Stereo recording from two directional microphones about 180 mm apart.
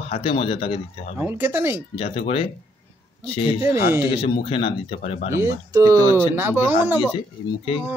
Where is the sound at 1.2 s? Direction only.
15° right (ahead or behind).